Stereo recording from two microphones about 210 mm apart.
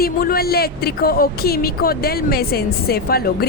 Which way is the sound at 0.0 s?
45° left (ahead or behind).